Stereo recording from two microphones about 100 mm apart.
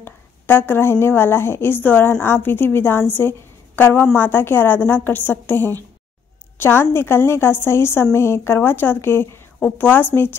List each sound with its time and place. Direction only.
0.0 s a woman's voice: 20° left (ahead or behind)